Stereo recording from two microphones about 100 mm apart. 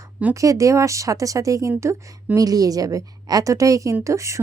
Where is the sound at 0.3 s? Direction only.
35° right (ahead or behind).